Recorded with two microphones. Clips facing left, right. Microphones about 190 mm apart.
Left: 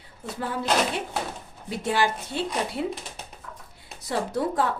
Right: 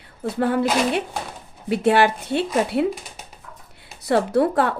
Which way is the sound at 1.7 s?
65° right (ahead or behind).